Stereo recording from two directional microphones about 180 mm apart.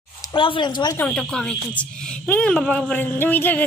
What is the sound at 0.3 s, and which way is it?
Speech, 25° left (ahead or behind).